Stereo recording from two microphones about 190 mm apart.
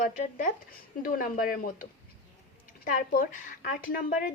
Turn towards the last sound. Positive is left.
turn(degrees=55)  # may be behind; listen again after turning